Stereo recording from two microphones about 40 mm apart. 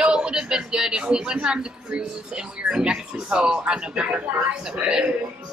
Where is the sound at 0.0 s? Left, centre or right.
Right.